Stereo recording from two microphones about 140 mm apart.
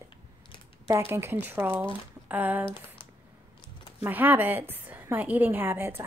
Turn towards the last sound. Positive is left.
turn(degrees=-15)  # may be behind; listen again after turning